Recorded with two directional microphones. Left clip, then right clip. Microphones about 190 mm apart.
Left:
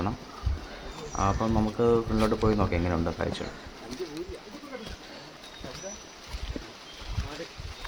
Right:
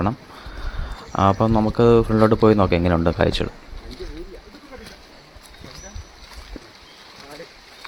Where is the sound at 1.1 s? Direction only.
30° right (ahead or behind).